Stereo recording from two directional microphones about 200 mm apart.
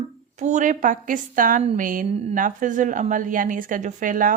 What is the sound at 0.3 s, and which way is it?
A woman's voice, 35° right (ahead or behind).